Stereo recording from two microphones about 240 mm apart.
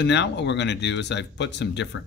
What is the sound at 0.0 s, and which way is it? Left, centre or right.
Speech, left.